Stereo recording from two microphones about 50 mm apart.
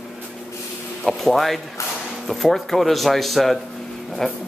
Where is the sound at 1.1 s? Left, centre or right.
Centre.